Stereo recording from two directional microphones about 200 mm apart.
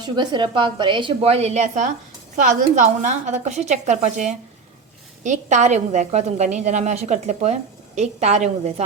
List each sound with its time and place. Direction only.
0.0 s a woman's voice: 20° right (ahead or behind)